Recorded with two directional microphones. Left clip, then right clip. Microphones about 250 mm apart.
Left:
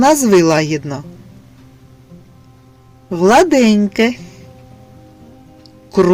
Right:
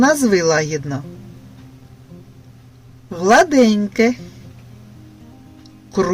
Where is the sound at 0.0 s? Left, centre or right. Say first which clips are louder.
Left 4 dB; left.